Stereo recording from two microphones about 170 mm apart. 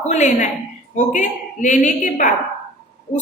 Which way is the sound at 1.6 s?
45° left (ahead or behind).